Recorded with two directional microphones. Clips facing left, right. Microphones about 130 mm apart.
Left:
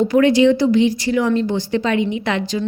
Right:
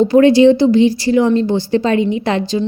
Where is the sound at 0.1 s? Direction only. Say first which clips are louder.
Right 5 dB; 30° right (ahead or behind).